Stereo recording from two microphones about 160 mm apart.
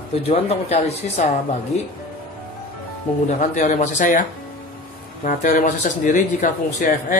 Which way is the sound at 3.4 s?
45° left (ahead or behind).